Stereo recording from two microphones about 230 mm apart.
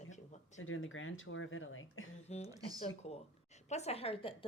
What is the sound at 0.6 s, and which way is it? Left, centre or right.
Speech, left.